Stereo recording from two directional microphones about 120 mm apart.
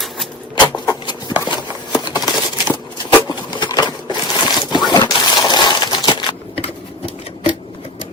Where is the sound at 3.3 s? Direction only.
35° left (ahead or behind).